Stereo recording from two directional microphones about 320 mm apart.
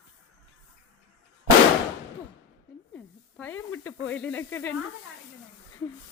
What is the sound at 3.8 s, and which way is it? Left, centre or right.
Speech, centre.